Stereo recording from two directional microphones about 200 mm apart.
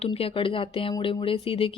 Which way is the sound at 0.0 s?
30° left (ahead or behind).